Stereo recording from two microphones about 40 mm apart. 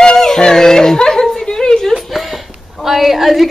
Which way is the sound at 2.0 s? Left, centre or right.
Centre.